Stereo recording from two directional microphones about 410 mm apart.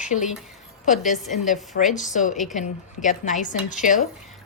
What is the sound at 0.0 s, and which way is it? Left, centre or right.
Speech, centre.